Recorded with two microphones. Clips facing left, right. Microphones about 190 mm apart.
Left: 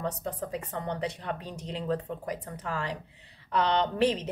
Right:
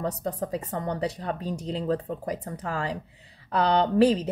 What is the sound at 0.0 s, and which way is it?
Speech, 35° right (ahead or behind).